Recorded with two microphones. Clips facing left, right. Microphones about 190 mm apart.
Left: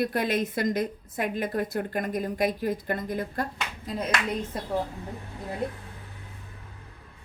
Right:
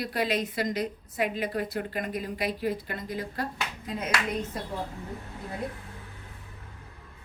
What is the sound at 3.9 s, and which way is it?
Speech, 35° left (ahead or behind).